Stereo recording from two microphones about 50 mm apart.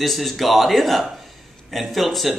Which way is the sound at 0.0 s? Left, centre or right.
Centre.